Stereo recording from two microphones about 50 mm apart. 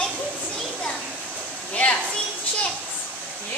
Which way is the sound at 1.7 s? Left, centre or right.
Left.